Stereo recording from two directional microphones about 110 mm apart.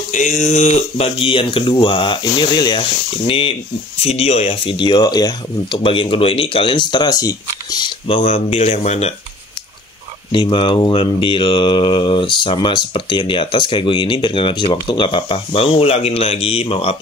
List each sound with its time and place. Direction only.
0.2 s speech: 90° left; by 2.8 s 40° left (ahead or behind)
2.8 s speech: 60° left (ahead or behind)
4.7 s speech: 40° left (ahead or behind)
8.1 s speech: 65° left (ahead or behind); by 9.1 s 85° left
10.3 s speech: 50° left (ahead or behind)